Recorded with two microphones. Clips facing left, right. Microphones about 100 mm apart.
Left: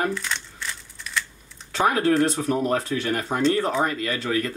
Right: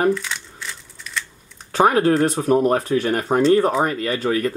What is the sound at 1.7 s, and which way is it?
Speech, 35° right (ahead or behind).